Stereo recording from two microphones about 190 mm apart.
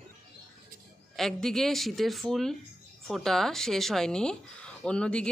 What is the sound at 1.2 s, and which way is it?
Speech, centre (ahead or behind).